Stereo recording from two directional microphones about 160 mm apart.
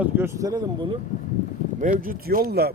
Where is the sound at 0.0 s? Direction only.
15° right (ahead or behind).